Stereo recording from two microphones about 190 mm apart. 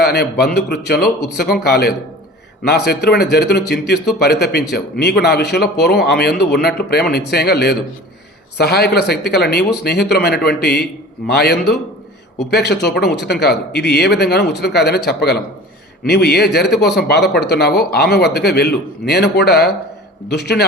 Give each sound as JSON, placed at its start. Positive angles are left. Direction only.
{"t": 0.0, "sound": "speech", "side_deg": 60}